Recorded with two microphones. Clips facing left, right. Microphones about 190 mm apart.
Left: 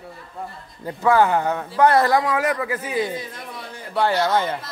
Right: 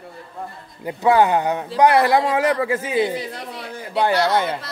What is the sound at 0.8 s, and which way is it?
A man's voice, 15° right (ahead or behind).